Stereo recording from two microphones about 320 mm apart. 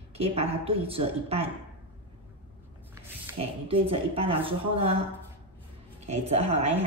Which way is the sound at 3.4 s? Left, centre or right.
Centre.